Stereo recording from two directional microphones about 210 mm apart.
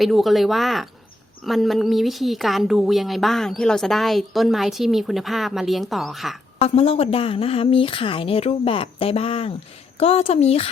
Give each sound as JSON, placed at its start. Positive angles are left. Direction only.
{"t": 0.0, "sound": "a woman's voice", "side_deg": 0}
{"t": 6.6, "sound": "a woman's voice", "side_deg": 25}